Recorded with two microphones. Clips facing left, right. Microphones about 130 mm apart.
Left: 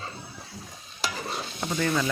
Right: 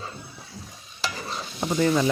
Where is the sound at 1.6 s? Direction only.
20° right (ahead or behind).